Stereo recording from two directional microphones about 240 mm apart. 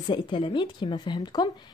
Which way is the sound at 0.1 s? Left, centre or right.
Left.